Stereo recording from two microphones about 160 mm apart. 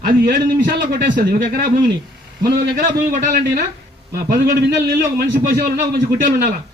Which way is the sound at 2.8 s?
60° right (ahead or behind).